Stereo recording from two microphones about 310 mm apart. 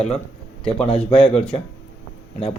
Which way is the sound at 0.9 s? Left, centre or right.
Centre.